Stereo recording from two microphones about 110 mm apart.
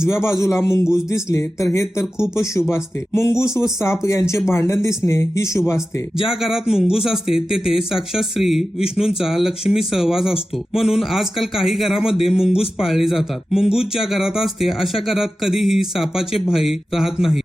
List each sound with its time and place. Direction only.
0.0 s speech: 25° left (ahead or behind)
6.1 s speech: 5° right (ahead or behind)